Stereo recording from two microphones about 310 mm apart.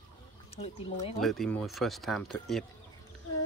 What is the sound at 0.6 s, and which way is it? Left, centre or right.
Speech, centre.